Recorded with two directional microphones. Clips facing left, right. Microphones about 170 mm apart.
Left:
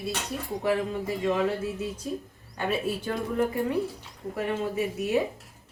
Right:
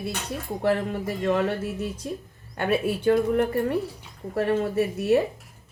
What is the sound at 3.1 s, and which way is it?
Speech, 65° right (ahead or behind).